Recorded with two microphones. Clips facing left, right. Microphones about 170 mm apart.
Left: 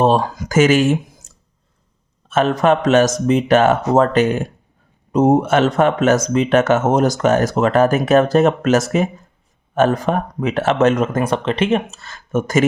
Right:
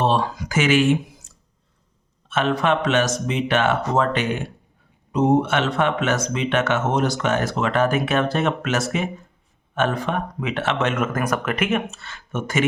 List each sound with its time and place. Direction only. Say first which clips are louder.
0.0 s speech: left 5 dB; 45° left (ahead or behind)
1.2 s clicking: left 2 dB; 45° left (ahead or behind)
2.3 s speech: left 5 dB; 40° left (ahead or behind)